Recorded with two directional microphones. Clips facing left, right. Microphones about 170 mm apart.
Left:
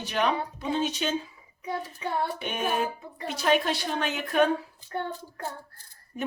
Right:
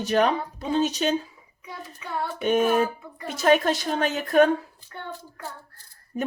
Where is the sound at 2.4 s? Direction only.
45° right (ahead or behind).